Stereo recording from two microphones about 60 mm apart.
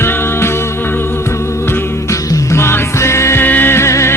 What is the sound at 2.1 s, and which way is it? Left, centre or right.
Music, left.